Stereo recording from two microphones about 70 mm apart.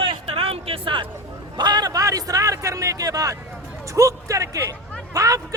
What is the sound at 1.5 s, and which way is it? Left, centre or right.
A man's voice, right.